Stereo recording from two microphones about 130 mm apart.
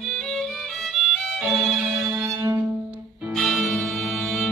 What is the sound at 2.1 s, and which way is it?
Music, 20° right (ahead or behind).